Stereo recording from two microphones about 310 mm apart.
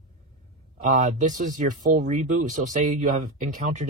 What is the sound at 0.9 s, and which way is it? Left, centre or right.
A man's voice, right.